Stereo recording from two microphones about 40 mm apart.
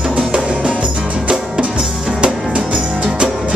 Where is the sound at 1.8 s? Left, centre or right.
Right.